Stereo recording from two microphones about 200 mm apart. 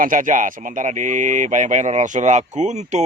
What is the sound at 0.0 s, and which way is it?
Speech, 40° right (ahead or behind).